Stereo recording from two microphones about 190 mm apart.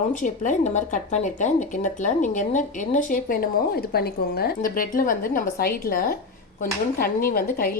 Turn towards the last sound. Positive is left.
turn(degrees=50)  # may be behind; listen again after turning